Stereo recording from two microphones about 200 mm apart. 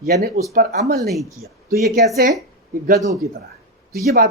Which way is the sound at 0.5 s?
50° right (ahead or behind).